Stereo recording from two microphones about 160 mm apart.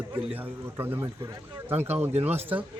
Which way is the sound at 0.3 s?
10° right (ahead or behind).